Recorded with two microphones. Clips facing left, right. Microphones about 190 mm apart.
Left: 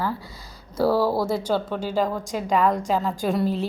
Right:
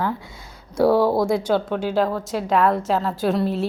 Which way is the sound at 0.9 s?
5° left (ahead or behind).